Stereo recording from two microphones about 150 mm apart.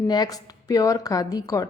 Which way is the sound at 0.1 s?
25° left (ahead or behind).